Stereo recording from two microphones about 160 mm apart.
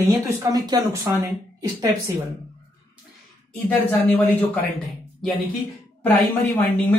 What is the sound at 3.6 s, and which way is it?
A man's voice, 10° left (ahead or behind).